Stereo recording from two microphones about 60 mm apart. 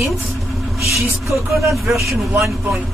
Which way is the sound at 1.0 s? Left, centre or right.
Right.